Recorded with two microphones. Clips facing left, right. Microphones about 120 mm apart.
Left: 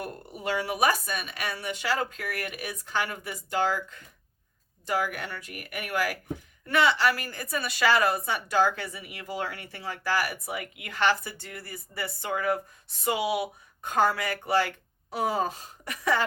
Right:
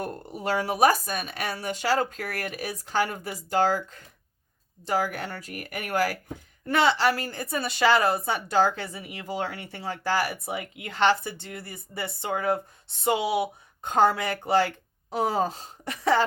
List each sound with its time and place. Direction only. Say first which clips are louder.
0.0 s a woman's voice: right 3 dB; 35° right (ahead or behind)